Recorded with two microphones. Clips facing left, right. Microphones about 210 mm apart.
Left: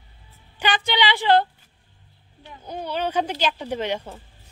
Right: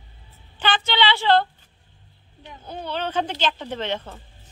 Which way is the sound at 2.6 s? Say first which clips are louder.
Left 2 dB; 10° left (ahead or behind).